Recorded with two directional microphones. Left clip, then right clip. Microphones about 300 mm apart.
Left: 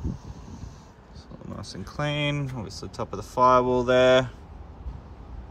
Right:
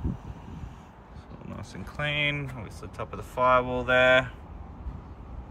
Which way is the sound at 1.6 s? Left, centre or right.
Centre.